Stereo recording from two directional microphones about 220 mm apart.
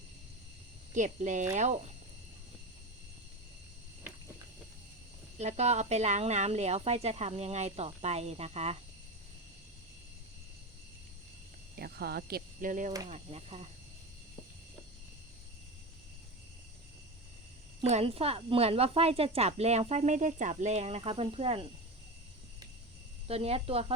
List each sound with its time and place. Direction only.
0.9 s speech: 35° right (ahead or behind)
5.4 s speech: 30° right (ahead or behind)
11.8 s cricket: 45° right (ahead or behind)
13.1 s speech: 30° right (ahead or behind)
17.7 s speech: 25° right (ahead or behind)
23.2 s speech: 25° right (ahead or behind)